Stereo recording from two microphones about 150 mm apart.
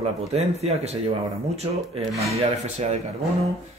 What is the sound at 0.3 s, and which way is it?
Speech, 45° right (ahead or behind).